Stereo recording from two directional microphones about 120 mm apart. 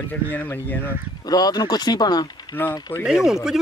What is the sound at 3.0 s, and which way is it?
Speech, 5° right (ahead or behind).